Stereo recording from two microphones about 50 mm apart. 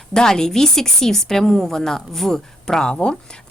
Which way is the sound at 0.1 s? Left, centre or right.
Centre.